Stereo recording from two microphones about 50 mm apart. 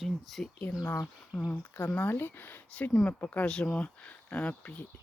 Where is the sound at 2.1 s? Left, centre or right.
Left.